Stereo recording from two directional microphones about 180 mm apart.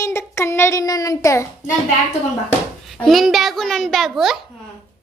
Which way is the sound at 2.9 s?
Centre (ahead or behind).